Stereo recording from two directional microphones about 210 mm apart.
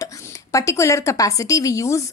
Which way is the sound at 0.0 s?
15° left (ahead or behind).